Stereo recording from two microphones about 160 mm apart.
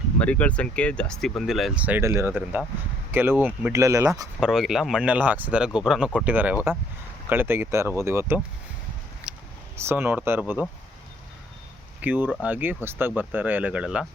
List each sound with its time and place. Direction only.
0.2 s speech: 10° left (ahead or behind); by 4.3 s 20° right (ahead or behind)
4.4 s speech: 5° right (ahead or behind)
9.3 s a sound: 5° right (ahead or behind)
9.7 s speech: 15° right (ahead or behind)
12.0 s speech: 10° right (ahead or behind)